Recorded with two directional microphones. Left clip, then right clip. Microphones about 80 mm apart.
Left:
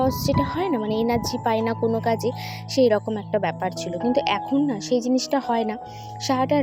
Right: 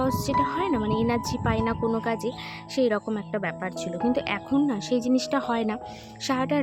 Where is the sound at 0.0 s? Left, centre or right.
Centre.